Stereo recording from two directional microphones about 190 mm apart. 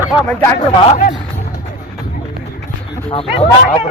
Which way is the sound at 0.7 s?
30° left (ahead or behind).